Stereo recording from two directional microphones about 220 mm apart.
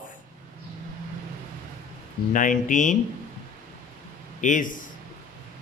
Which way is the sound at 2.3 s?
35° left (ahead or behind).